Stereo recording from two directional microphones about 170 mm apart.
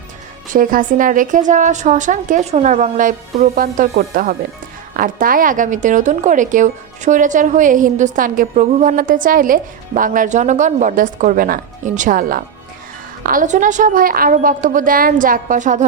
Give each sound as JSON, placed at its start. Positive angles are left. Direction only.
{"t": 0.5, "sound": "a woman's voice", "side_deg": -55}